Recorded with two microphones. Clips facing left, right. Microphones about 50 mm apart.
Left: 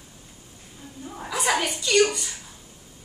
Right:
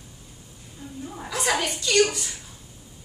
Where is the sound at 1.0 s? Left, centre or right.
Centre.